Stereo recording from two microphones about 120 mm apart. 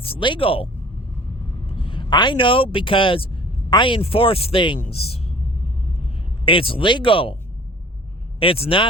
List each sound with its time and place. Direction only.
0.0 s speech: 45° left (ahead or behind)
4.8 s speech: 60° left (ahead or behind)
6.4 s speech: 45° left (ahead or behind)
8.4 s speech: 50° left (ahead or behind)